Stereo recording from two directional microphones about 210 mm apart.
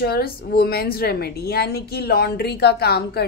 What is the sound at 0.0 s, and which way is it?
A woman's voice, 45° left (ahead or behind).